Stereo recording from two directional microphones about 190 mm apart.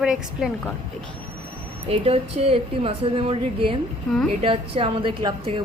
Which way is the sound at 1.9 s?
30° right (ahead or behind).